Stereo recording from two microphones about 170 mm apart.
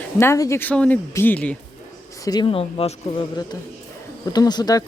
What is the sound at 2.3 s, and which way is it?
Speech, 30° left (ahead or behind).